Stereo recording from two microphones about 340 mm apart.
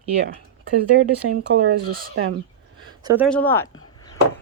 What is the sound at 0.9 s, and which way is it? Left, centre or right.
Speech, right.